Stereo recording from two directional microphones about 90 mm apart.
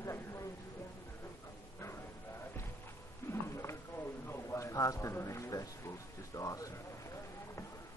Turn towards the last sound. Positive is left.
turn(degrees=35)  # may be behind; listen again after turning